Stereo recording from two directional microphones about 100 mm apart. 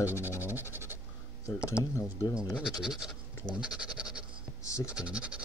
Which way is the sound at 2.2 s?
40° left (ahead or behind).